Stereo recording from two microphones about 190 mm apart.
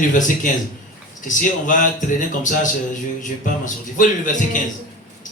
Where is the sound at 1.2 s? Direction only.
45° left (ahead or behind).